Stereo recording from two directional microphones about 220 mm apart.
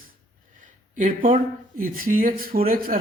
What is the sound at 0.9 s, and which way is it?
Speech, 35° right (ahead or behind).